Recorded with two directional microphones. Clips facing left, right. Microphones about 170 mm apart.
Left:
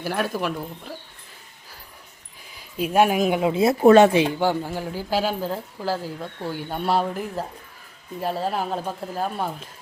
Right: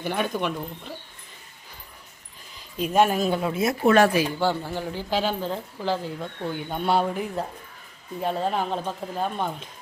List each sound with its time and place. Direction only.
0.0 s speech: 5° left (ahead or behind)
2.6 s speech: 5° left (ahead or behind); by 4.3 s 25° left (ahead or behind)
4.4 s speech: 15° left (ahead or behind)